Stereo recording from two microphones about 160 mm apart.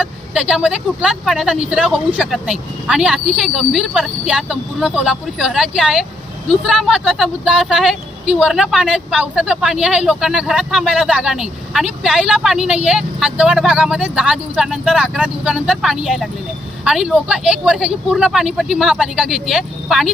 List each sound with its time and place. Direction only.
0.0 s speech: 5° right (ahead or behind)